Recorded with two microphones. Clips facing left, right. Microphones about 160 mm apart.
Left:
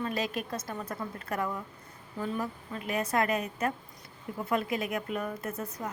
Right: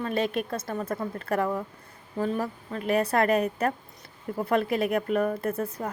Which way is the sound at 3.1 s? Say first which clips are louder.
Right 4 dB; 60° right (ahead or behind).